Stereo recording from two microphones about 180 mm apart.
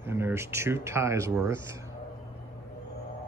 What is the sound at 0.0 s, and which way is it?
Speech, 15° right (ahead or behind).